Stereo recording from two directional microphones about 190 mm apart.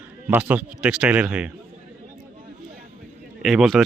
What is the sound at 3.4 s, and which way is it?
Speech, centre (ahead or behind).